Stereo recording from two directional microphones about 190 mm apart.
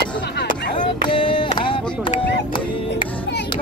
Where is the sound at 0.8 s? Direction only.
25° left (ahead or behind).